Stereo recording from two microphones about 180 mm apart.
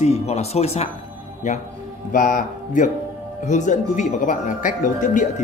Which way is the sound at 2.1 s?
50° left (ahead or behind).